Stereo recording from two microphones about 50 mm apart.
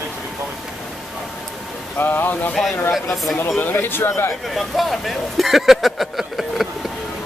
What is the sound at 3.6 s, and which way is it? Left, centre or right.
Speech, left.